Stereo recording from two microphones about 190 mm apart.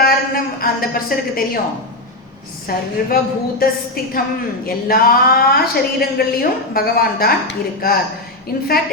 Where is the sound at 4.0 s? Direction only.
50° left (ahead or behind).